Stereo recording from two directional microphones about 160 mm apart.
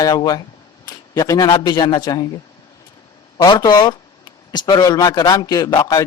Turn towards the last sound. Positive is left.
turn(degrees=25)  # may be behind; listen again after turning